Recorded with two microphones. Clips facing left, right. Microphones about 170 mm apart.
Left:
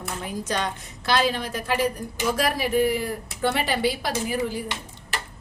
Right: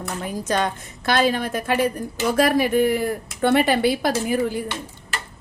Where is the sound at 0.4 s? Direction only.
50° right (ahead or behind).